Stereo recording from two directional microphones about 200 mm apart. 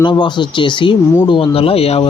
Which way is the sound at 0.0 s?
25° left (ahead or behind).